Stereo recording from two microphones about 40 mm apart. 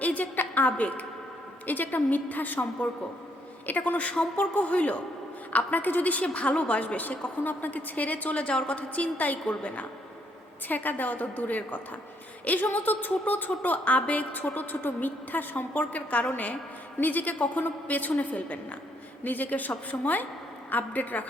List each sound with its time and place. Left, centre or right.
0.0 s a sound: left
1.6 s speech: left
3.7 s speech: left
4.0 s speech: left
4.4 s a woman's voice: left
5.5 s speech: left
6.2 s a woman's voice: left
9.1 s a woman's voice: left
19.2 s speech: left